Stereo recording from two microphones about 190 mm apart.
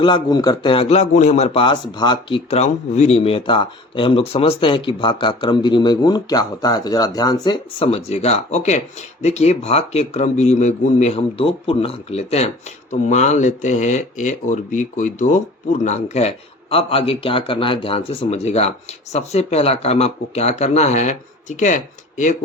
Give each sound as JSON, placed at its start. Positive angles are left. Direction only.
{"t": 0.0, "sound": "speech", "side_deg": 20}